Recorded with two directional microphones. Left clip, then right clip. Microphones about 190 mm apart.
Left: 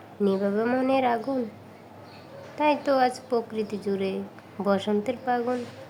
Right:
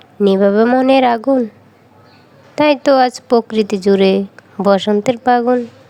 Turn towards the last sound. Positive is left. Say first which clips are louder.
# right 14 dB
turn(degrees=-45)  # may be behind; listen again after turning